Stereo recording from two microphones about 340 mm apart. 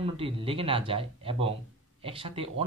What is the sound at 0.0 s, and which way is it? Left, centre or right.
Speech, centre.